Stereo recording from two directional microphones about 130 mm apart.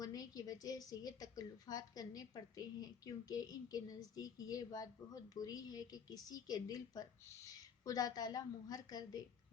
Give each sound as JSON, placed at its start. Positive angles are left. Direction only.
{"t": 0.0, "sound": "a woman's voice", "side_deg": 30}